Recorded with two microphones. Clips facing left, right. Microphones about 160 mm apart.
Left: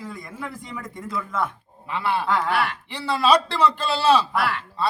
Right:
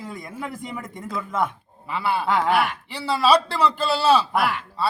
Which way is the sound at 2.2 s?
15° right (ahead or behind).